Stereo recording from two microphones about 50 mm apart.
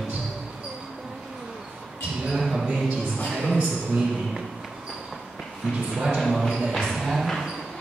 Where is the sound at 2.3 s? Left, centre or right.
Centre.